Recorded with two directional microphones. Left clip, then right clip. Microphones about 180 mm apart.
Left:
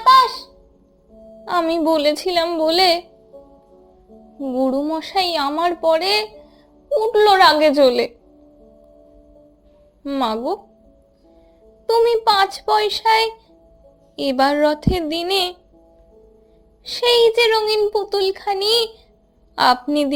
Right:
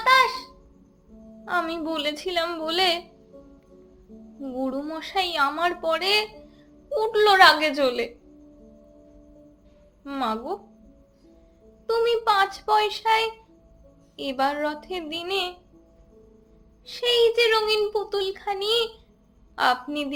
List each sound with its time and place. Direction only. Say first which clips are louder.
0.0 s a sound: left 7 dB; 20° left (ahead or behind)
1.5 s speech: left 9 dB; 35° left (ahead or behind)
4.4 s a child's voice: left 10 dB; 30° left (ahead or behind)
10.0 s speech: left 7 dB; 35° left (ahead or behind)
11.9 s a child's voice: left 7 dB; 35° left (ahead or behind)
16.8 s a child's voice: left 6 dB; 45° left (ahead or behind)